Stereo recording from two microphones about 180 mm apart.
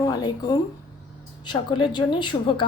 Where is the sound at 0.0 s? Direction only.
20° left (ahead or behind).